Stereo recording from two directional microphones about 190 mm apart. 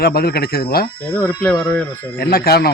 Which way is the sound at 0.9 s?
10° left (ahead or behind).